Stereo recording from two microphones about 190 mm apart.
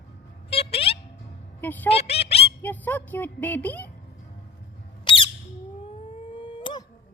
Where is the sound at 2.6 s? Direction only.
10° left (ahead or behind).